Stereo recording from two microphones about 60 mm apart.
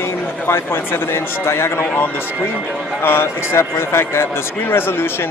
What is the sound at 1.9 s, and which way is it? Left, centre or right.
A man's voice, left.